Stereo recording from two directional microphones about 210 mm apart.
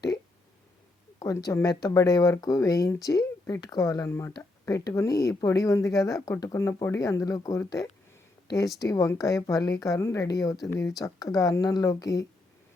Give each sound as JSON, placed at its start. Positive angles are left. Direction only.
{"t": 1.2, "sound": "speech", "side_deg": 15}